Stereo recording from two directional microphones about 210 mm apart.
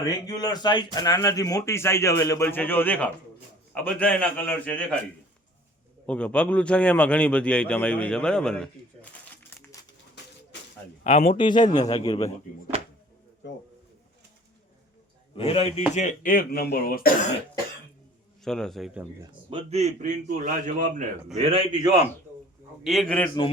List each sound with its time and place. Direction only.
0.3 s a man's voice: 15° left (ahead or behind)
6.1 s a man's voice: 5° left (ahead or behind)
11.0 s a man's voice: 30° left (ahead or behind)
13.4 s speech: 55° left (ahead or behind)
15.4 s a man's voice: 25° left (ahead or behind)
16.0 s speech: 40° left (ahead or behind)
18.4 s a man's voice: centre (ahead or behind)
19.2 s a man's voice: 25° right (ahead or behind); by 21.1 s 40° right (ahead or behind)
21.3 s a man's voice: 25° right (ahead or behind)
22.8 s a man's voice: centre (ahead or behind)